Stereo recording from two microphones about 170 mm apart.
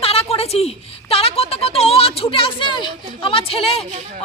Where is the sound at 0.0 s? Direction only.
35° left (ahead or behind).